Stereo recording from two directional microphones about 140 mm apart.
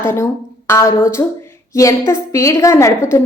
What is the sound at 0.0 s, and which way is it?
A woman's voice, 20° left (ahead or behind).